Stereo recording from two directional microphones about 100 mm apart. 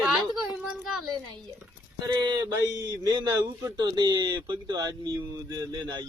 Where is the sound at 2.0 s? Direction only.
40° right (ahead or behind).